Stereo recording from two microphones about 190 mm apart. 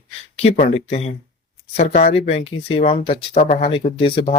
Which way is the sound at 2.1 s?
30° left (ahead or behind).